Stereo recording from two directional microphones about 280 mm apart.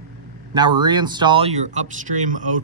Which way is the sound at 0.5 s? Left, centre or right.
Centre.